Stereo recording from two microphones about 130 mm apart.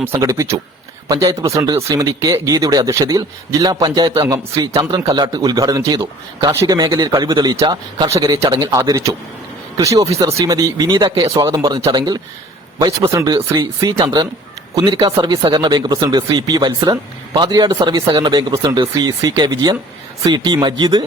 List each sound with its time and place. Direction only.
0.0 s speech: 25° right (ahead or behind)
6.5 s speech: 20° right (ahead or behind)
6.7 s speech: 30° right (ahead or behind)